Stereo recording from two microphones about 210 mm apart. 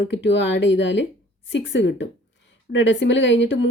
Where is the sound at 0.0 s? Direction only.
55° left (ahead or behind).